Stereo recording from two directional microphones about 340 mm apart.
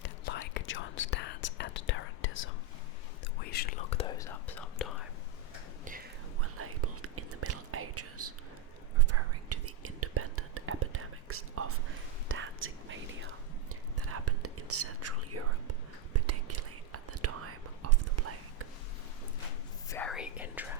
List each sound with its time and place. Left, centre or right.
0.0 s whispering: left
3.5 s whispering: left; by 4.9 s centre
6.4 s whispering: right
19.9 s whispering: centre